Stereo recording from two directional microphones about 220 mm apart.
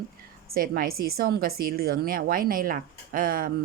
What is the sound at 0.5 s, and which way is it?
A woman's voice, 40° right (ahead or behind).